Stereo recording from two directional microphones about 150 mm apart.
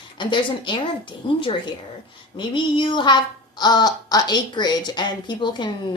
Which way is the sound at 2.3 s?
35° left (ahead or behind).